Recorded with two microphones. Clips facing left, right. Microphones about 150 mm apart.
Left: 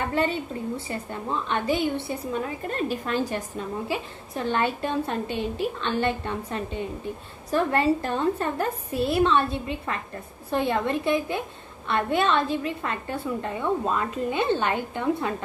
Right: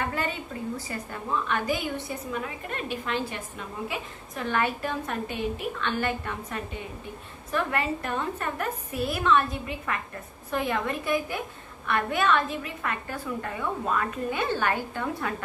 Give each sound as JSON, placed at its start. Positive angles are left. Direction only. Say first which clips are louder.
{"t": 0.0, "sound": "a woman's voice", "louder": "left 5 dB", "side_deg": 30}